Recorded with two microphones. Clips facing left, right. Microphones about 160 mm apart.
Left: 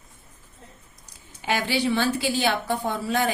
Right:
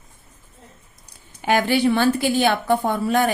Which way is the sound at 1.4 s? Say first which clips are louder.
Right 6 dB; 50° right (ahead or behind).